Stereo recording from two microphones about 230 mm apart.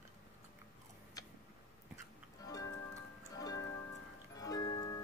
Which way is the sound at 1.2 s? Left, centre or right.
Centre.